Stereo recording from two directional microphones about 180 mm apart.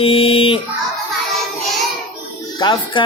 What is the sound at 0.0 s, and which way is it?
Music, 30° left (ahead or behind).